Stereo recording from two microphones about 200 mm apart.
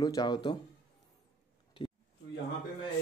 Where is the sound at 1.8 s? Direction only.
20° left (ahead or behind).